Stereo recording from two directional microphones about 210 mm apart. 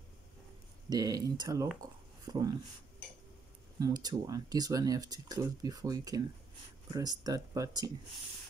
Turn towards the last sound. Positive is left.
turn(degrees=-15)  # may be behind; listen again after turning